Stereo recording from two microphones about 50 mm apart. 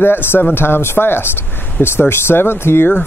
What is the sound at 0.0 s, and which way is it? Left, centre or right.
Speech, left.